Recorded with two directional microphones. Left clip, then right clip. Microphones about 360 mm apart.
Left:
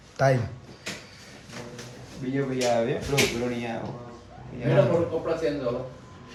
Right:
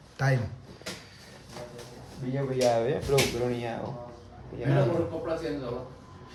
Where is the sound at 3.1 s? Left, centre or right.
Right.